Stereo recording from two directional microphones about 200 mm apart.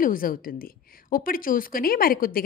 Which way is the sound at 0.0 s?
45° left (ahead or behind).